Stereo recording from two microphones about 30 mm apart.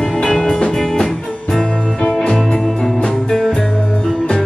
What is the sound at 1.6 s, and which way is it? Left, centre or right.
Music, left.